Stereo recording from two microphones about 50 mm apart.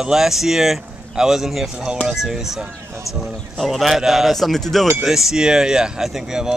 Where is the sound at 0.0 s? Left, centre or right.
Centre.